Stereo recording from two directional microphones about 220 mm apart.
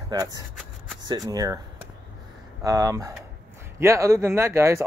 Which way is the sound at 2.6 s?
15° right (ahead or behind).